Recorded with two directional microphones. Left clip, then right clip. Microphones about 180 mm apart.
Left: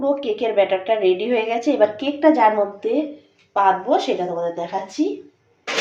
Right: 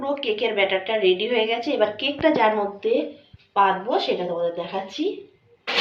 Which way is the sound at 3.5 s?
60° left (ahead or behind).